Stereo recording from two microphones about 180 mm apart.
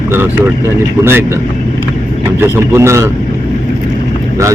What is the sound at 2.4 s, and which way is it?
Speech, 15° right (ahead or behind).